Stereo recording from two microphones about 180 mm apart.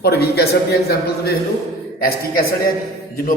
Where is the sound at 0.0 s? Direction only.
65° left (ahead or behind).